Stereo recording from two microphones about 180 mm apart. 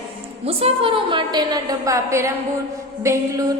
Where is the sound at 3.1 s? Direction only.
15° right (ahead or behind).